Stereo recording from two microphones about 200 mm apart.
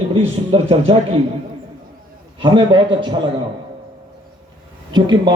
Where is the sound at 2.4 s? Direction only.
25° right (ahead or behind).